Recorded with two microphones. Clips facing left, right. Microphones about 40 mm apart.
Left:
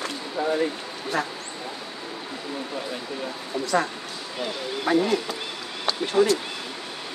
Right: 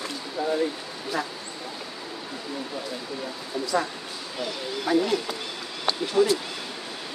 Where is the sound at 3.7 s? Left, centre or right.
Left.